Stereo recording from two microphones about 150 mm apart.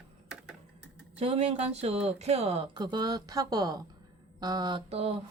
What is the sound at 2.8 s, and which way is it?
Speech, 30° right (ahead or behind).